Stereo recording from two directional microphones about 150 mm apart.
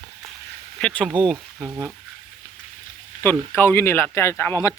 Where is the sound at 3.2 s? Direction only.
15° left (ahead or behind).